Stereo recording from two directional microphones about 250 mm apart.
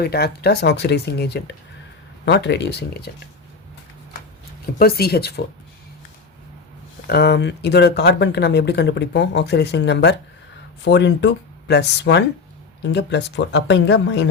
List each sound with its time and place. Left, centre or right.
0.0 s speech: left
4.8 s speech: left
7.1 s speech: left